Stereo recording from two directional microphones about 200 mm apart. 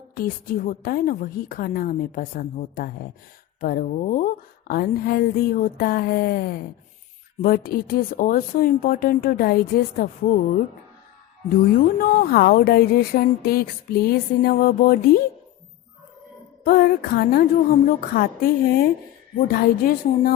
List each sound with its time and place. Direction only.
0.1 s speech: 45° left (ahead or behind)
11.9 s speech: 45° left (ahead or behind)
16.6 s speech: 45° left (ahead or behind)